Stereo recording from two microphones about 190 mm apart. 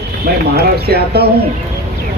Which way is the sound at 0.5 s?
55° right (ahead or behind).